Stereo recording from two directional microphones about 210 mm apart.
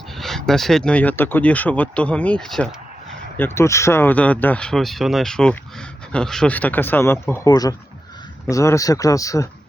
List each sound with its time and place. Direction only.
0.2 s speech: centre (ahead or behind)